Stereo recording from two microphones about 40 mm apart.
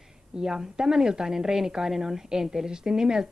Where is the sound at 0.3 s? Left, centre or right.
Centre.